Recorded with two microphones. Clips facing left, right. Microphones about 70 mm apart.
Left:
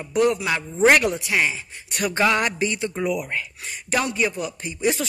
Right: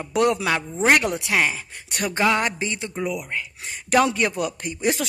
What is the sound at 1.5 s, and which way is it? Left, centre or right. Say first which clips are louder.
Speech: even; right.